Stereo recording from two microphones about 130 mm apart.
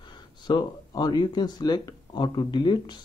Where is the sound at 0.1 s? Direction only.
35° left (ahead or behind).